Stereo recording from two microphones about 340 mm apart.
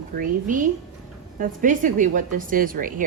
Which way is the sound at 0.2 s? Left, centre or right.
Right.